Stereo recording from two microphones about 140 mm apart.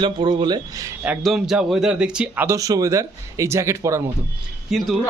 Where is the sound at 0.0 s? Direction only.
35° right (ahead or behind).